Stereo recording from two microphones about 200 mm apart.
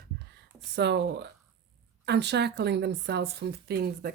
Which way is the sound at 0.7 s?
55° right (ahead or behind).